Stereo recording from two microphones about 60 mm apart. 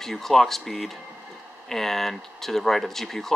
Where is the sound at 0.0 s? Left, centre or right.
Centre.